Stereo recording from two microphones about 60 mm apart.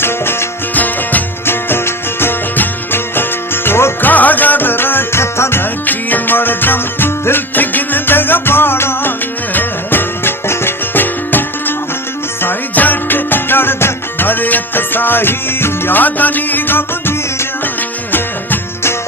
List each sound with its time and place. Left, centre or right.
0.0 s music: left
0.7 s music: left
4.0 s music: left
5.8 s music: left